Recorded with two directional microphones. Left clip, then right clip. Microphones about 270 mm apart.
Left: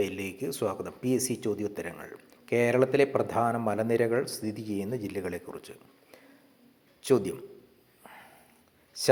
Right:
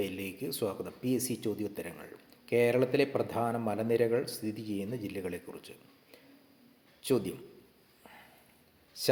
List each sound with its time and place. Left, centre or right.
0.0 s speech: centre
8.0 s a sound: centre
8.9 s speech: centre